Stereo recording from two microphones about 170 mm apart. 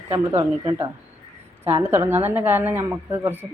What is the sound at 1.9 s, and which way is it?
Speech, 10° right (ahead or behind).